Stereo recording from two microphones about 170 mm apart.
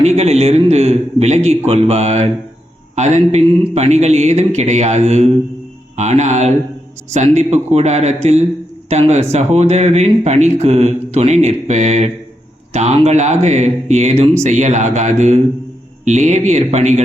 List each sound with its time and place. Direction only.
0.0 s speech: 40° right (ahead or behind)